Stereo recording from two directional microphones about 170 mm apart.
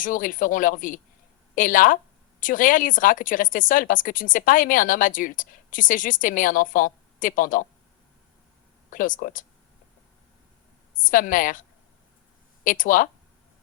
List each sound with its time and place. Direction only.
0.0 s speech: 50° left (ahead or behind)
8.9 s speech: 50° left (ahead or behind)
10.9 s speech: 50° left (ahead or behind)
12.6 s speech: 50° left (ahead or behind)